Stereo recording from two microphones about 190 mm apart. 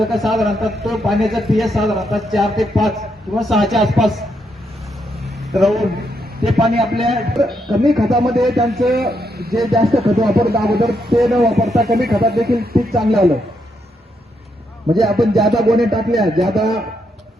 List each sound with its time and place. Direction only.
0.0 s a man's voice: centre (ahead or behind)
5.2 s a sound: centre (ahead or behind)
6.4 s a man's voice: centre (ahead or behind)
9.0 s speech: 55° right (ahead or behind)
9.6 s a man's voice: centre (ahead or behind)
10.3 s speech: 55° right (ahead or behind)
10.8 s a man's voice: centre (ahead or behind)
11.9 s speech: 55° right (ahead or behind)
12.9 s a man's voice: centre (ahead or behind)
14.9 s a man's voice: centre (ahead or behind)